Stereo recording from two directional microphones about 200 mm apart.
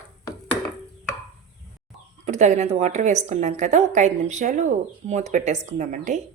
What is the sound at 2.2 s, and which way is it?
Speech, 35° right (ahead or behind).